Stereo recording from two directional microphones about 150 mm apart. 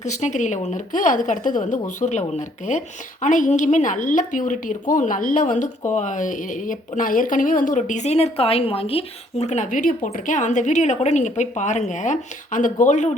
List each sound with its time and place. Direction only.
0.0 s a woman's voice: 50° left (ahead or behind)